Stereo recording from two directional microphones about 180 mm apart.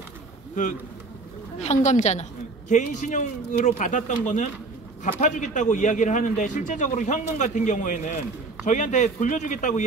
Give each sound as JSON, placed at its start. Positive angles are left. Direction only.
{"t": 1.6, "sound": "a woman's voice", "side_deg": 40}